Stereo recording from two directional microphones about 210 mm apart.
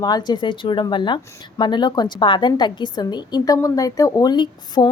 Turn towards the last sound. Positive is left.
turn(degrees=20)  # may be behind; listen again after turning